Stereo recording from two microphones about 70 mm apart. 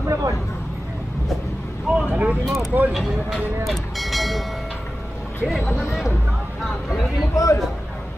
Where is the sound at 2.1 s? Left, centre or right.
Right.